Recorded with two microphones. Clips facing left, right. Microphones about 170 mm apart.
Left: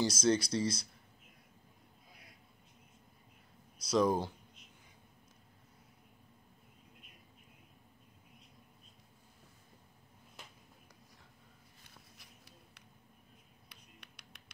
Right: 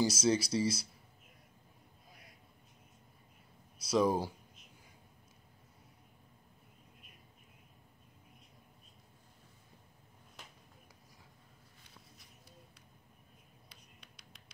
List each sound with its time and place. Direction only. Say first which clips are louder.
0.0 s speech: even; 5° right (ahead or behind)
3.9 s speech: even; 5° right (ahead or behind)
13.7 s music: left 3 dB; 65° left (ahead or behind)